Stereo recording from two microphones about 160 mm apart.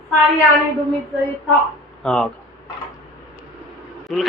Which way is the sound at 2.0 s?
5° left (ahead or behind).